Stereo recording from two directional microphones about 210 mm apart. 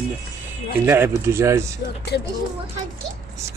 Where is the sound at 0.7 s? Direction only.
10° right (ahead or behind).